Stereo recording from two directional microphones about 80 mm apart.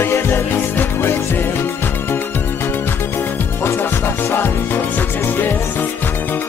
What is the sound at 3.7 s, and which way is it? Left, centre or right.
Music, left.